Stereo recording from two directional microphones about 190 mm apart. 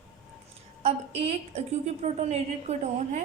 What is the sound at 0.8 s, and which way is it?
A woman's voice, 30° right (ahead or behind).